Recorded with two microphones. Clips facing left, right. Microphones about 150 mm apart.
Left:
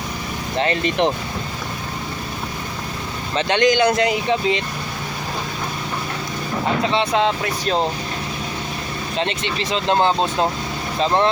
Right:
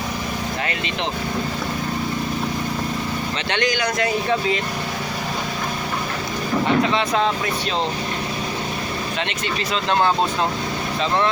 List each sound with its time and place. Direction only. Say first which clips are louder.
3.5 s speech: left 7 dB; 20° left (ahead or behind)
6.8 s speech: left 1 dB; 30° left (ahead or behind)
9.7 s speech: left 2 dB; 25° left (ahead or behind)